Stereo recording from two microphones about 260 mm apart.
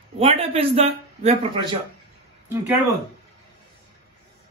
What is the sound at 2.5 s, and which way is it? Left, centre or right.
Speech, centre.